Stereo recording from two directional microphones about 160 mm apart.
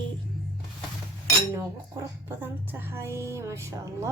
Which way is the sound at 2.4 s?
15° right (ahead or behind).